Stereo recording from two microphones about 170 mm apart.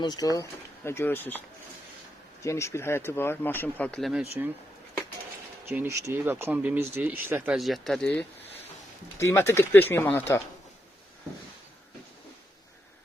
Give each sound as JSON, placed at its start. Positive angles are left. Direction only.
{"t": 0.0, "sound": "speech", "side_deg": 25}
{"t": 2.4, "sound": "speech", "side_deg": 15}
{"t": 5.6, "sound": "speech", "side_deg": -10}
{"t": 7.6, "sound": "speech", "side_deg": 0}
{"t": 9.1, "sound": "speech", "side_deg": 15}